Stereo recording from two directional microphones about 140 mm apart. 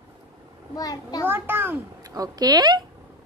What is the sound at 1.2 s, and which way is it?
Speech, 15° right (ahead or behind).